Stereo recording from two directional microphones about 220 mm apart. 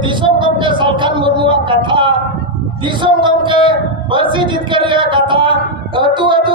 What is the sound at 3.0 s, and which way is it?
Speech, 20° right (ahead or behind).